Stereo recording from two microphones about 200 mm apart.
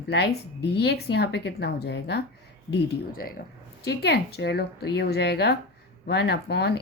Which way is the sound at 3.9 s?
55° left (ahead or behind).